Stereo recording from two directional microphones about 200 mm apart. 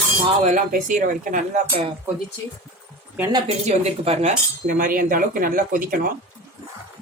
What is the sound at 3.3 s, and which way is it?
Speech, 30° right (ahead or behind).